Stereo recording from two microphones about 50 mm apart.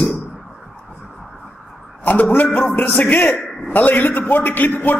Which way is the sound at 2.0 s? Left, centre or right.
Left.